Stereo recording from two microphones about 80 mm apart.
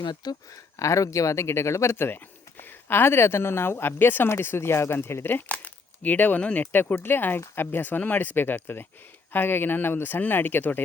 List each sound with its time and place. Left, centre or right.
0.0 s speech: left
0.8 s speech: left